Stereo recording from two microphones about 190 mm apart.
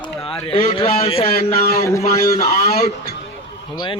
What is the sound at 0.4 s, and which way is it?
Speech, 30° left (ahead or behind).